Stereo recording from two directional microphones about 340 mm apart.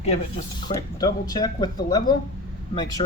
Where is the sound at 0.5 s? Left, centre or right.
Centre.